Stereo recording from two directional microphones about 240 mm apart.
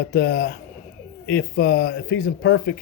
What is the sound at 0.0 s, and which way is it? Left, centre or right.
Speech, left.